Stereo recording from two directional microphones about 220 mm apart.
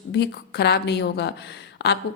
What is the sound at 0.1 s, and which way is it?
Speech, 50° left (ahead or behind).